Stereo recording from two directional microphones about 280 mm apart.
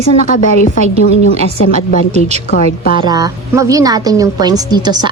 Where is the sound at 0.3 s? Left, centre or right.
Left.